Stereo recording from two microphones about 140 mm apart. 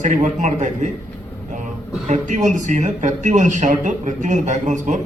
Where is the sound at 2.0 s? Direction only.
60° right (ahead or behind).